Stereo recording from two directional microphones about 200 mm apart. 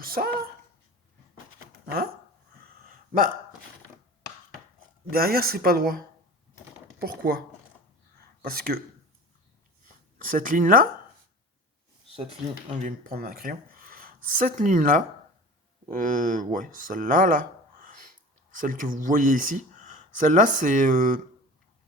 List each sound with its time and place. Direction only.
0.0 s speech: 45° right (ahead or behind)
2.6 s a sound: 45° right (ahead or behind)
5.1 s speech: 50° right (ahead or behind)
7.0 s speech: 50° right (ahead or behind)
8.2 s a sound: 50° right (ahead or behind)
10.2 s speech: 40° right (ahead or behind)
12.7 s speech: 40° right (ahead or behind)